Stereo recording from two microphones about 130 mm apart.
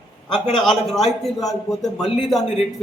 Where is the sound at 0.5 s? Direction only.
5° left (ahead or behind).